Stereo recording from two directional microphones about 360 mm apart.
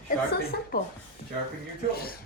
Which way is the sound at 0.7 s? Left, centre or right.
Left.